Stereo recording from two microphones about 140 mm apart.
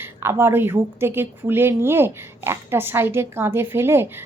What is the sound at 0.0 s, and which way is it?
A woman's voice, 15° right (ahead or behind).